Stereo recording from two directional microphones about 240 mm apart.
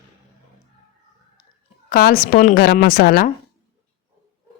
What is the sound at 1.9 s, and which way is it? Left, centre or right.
Speech, left.